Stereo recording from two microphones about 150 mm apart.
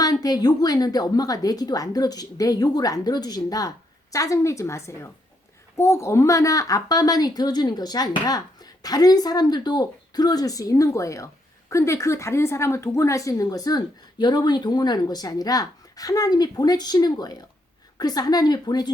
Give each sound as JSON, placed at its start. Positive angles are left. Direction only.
{"t": 0.0, "sound": "a woman's voice", "side_deg": 25}